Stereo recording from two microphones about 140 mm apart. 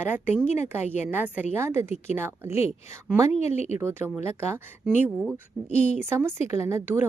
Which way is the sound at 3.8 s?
15° right (ahead or behind).